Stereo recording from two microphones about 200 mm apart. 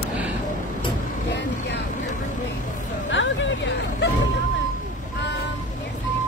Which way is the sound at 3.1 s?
65° left (ahead or behind).